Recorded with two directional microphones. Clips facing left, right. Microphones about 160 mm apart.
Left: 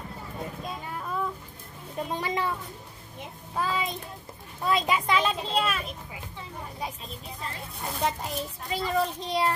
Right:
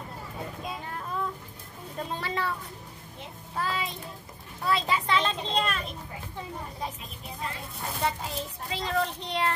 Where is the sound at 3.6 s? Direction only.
15° left (ahead or behind).